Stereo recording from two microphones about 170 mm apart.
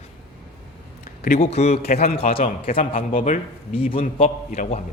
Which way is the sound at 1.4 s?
40° left (ahead or behind).